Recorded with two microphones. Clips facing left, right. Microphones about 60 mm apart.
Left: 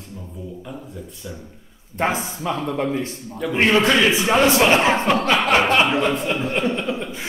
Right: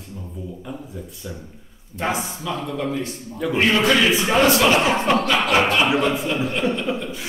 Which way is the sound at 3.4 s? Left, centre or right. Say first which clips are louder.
Right 1 dB; centre.